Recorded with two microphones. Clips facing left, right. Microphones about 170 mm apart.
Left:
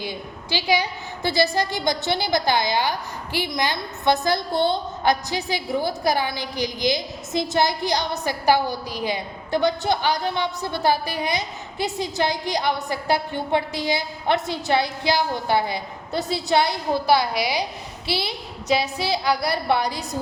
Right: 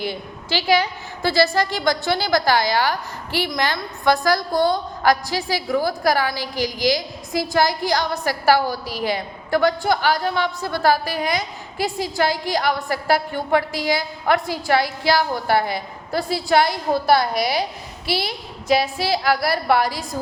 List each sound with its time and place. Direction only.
0.0 s a woman's voice: 15° left (ahead or behind)
16.9 s a woman's voice: 50° right (ahead or behind)
17.4 s a woman's voice: 15° left (ahead or behind)
18.9 s a woman's voice: 20° left (ahead or behind)